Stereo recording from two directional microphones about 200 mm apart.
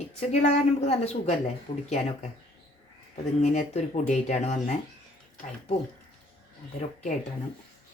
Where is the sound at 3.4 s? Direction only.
35° left (ahead or behind).